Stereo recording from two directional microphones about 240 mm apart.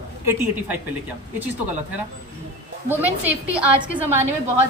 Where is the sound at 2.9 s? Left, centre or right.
Centre.